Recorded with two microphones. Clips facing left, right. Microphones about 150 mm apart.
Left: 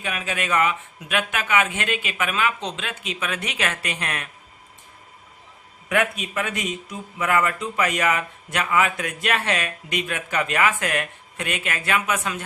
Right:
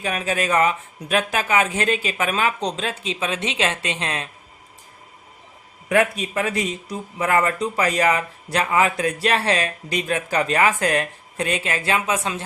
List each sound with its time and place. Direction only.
0.0 s speech: 35° right (ahead or behind)
5.9 s speech: 35° right (ahead or behind)